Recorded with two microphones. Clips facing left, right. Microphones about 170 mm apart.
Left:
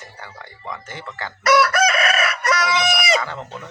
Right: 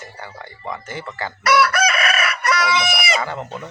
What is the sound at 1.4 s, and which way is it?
Chicken, 45° left (ahead or behind).